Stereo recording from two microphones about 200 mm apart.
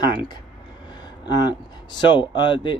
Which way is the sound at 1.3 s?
20° left (ahead or behind).